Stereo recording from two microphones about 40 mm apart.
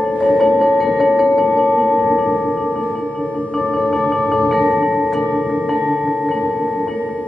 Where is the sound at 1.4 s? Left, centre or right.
Left.